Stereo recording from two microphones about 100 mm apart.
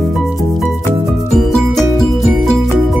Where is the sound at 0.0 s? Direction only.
Centre (ahead or behind).